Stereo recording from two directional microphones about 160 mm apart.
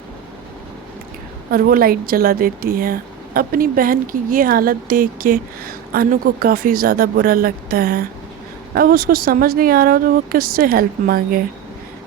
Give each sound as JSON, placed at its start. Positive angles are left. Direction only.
{"t": 1.5, "sound": "speech", "side_deg": -70}